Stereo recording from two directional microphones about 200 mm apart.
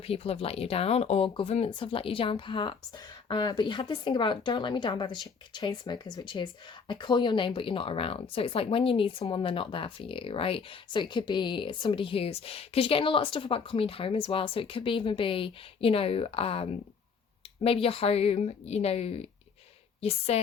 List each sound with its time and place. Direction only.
0.0 s a woman's voice: 30° left (ahead or behind)